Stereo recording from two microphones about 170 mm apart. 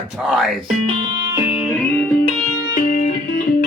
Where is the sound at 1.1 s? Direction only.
15° right (ahead or behind).